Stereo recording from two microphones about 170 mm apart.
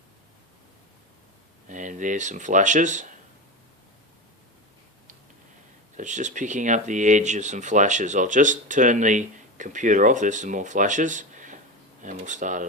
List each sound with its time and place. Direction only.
1.6 s speech: 50° right (ahead or behind)
6.0 s speech: 45° right (ahead or behind)